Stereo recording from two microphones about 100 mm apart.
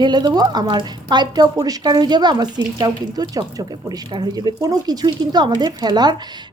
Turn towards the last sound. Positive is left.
turn(degrees=-45)  # may be behind; listen again after turning